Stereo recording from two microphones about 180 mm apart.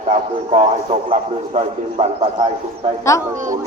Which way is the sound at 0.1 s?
35° right (ahead or behind).